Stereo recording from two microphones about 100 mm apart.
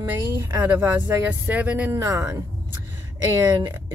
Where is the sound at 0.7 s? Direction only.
20° right (ahead or behind).